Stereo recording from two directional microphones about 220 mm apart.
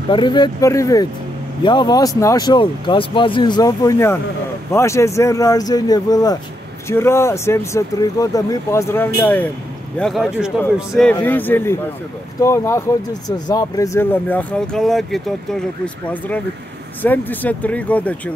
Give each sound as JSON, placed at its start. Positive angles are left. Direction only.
{"t": 0.1, "sound": "speech", "side_deg": 20}